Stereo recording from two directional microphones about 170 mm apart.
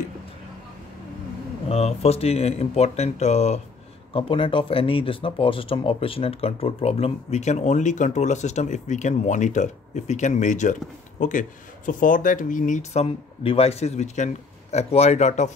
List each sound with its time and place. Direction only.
1.7 s speech: 35° left (ahead or behind)